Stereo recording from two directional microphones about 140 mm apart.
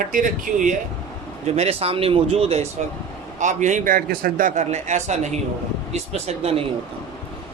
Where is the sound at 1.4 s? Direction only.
50° right (ahead or behind).